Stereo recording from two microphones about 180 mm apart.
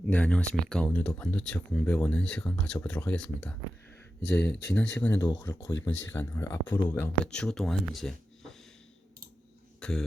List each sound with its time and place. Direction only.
0.0 s speech: 5° left (ahead or behind)
9.8 s speech: 5° left (ahead or behind)